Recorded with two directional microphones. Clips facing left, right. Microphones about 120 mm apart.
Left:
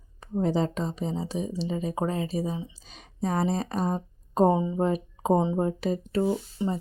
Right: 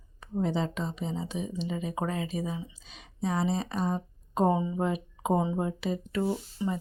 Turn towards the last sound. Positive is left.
turn(degrees=20)  # may be behind; listen again after turning